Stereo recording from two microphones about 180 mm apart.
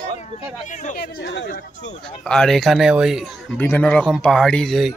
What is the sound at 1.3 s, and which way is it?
Speech, 70° left (ahead or behind).